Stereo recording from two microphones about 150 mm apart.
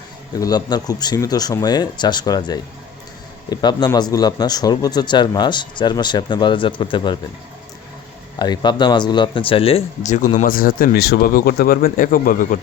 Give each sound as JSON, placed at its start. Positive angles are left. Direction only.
{"t": 0.3, "sound": "speech", "side_deg": 25}
{"t": 8.4, "sound": "speech", "side_deg": 30}
{"t": 10.0, "sound": "speech", "side_deg": 55}
{"t": 10.4, "sound": "speech", "side_deg": 70}